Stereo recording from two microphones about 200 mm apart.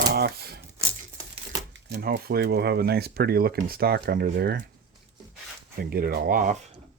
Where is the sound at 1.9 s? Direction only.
50° right (ahead or behind).